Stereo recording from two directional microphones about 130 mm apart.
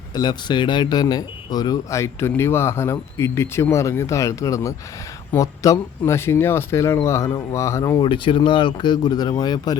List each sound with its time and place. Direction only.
0.1 s speech: 35° left (ahead or behind)
8.0 s speech: 40° left (ahead or behind)